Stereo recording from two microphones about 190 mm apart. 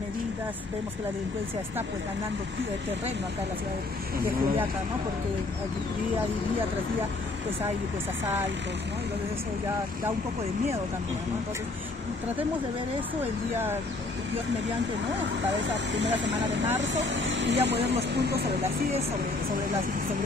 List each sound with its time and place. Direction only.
15.9 s speech: 70° right (ahead or behind)
17.6 s speech: 60° right (ahead or behind)